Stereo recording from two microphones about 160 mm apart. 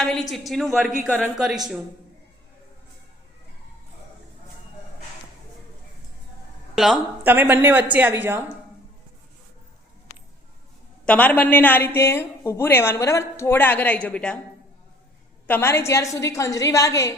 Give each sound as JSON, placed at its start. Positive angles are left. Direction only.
{"t": 0.0, "sound": "a woman's voice", "side_deg": 0}
{"t": 6.7, "sound": "speech", "side_deg": 0}
{"t": 7.3, "sound": "speech", "side_deg": -10}
{"t": 11.0, "sound": "a woman's voice", "side_deg": 10}
{"t": 15.4, "sound": "a woman's voice", "side_deg": 15}